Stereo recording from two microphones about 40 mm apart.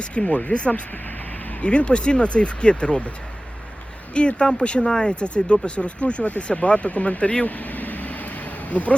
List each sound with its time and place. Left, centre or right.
0.0 s speech: left
4.1 s speech: left
7.4 s a sound: left